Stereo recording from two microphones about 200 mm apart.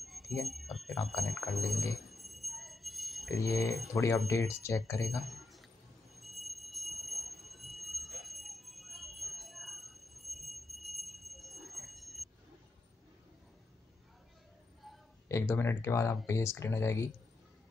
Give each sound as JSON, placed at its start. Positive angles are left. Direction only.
{"t": 0.0, "sound": "speech", "side_deg": 0}
{"t": 2.0, "sound": "jingle bell", "side_deg": 0}
{"t": 3.3, "sound": "speech", "side_deg": 15}
{"t": 5.1, "sound": "a sound", "side_deg": 0}
{"t": 6.1, "sound": "jingle bell", "side_deg": 0}
{"t": 15.2, "sound": "speech", "side_deg": 15}